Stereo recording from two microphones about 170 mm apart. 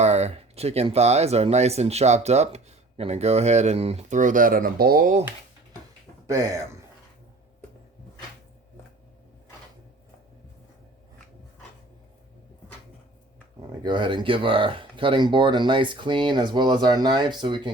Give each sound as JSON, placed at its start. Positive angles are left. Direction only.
{"t": 0.0, "sound": "speech", "side_deg": -40}
{"t": 6.2, "sound": "speech", "side_deg": -20}
{"t": 13.8, "sound": "speech", "side_deg": -25}